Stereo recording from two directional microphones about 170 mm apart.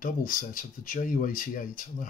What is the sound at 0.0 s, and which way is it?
Speech, 55° left (ahead or behind).